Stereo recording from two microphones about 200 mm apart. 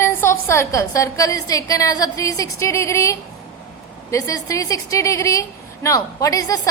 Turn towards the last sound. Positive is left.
turn(degrees=15)  # may be behind; listen again after turning